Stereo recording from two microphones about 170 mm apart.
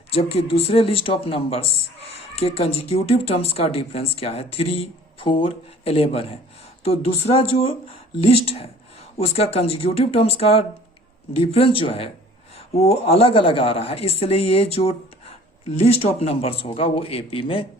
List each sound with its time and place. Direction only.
0.1 s speech: 35° left (ahead or behind)